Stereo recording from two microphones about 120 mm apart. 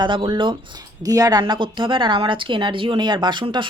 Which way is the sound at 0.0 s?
40° right (ahead or behind).